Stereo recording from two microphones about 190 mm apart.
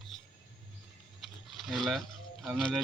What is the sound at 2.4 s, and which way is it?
Speech, 5° left (ahead or behind).